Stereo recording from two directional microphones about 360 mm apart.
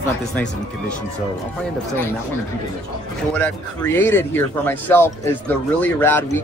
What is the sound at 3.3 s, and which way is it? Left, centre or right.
A man's voice, centre.